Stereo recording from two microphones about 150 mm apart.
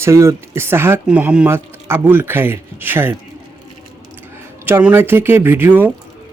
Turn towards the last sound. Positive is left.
turn(degrees=-15)  # may be behind; listen again after turning